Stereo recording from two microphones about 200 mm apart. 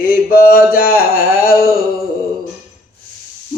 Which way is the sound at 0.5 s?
45° left (ahead or behind).